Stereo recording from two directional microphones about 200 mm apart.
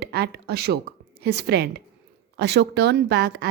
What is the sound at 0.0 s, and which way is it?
A woman's voice, 55° right (ahead or behind).